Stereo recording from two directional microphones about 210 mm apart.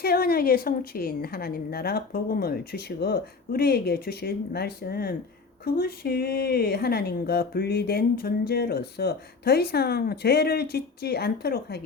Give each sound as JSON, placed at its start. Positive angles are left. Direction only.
{"t": 0.0, "sound": "a woman's voice", "side_deg": 45}